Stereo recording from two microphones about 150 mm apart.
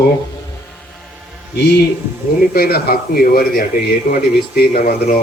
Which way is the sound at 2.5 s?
90° left.